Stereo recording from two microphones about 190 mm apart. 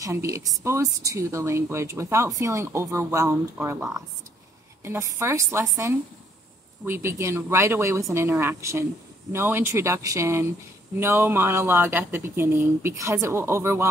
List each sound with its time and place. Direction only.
0.0 s speech: 15° right (ahead or behind)
4.8 s speech: 15° right (ahead or behind)